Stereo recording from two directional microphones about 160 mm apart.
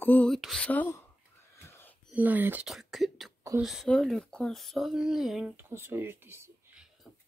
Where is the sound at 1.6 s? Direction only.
15° left (ahead or behind).